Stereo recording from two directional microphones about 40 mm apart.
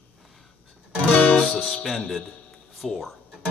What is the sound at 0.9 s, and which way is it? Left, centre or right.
Music, left.